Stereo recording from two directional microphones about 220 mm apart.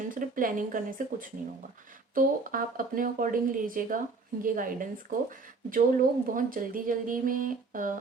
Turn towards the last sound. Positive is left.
turn(degrees=-35)  # may be behind; listen again after turning